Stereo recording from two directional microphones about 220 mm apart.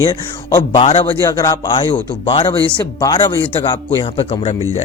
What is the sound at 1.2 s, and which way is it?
Speech, 15° left (ahead or behind).